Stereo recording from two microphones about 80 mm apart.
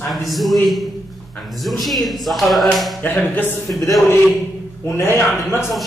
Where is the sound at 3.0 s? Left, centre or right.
Left.